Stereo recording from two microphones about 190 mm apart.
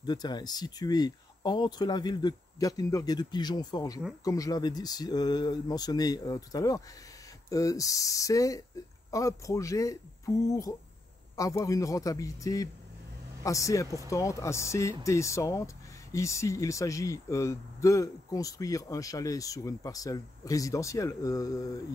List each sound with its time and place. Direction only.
0.0 s speech: 20° left (ahead or behind)